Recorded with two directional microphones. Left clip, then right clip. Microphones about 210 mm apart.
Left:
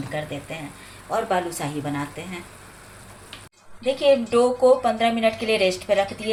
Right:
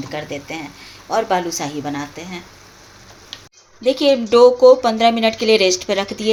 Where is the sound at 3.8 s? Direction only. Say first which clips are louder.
Right 3 dB; 50° right (ahead or behind).